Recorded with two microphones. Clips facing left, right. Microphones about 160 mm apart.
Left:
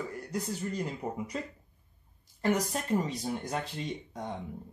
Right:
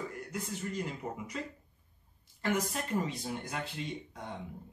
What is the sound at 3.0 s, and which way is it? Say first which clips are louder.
Speech: left 3 dB; 40° left (ahead or behind).